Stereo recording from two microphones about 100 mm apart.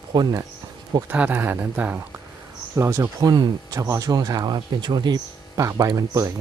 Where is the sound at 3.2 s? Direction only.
40° right (ahead or behind).